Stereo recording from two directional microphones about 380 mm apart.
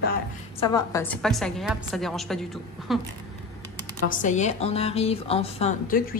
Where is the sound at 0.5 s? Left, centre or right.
Centre.